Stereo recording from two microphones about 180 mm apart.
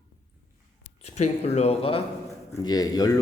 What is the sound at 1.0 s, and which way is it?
Speech, 40° left (ahead or behind).